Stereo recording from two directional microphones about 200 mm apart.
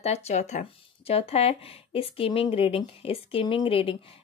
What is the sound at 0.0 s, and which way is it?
Speech, 30° left (ahead or behind).